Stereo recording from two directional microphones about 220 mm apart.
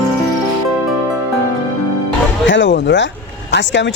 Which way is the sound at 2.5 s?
55° left (ahead or behind).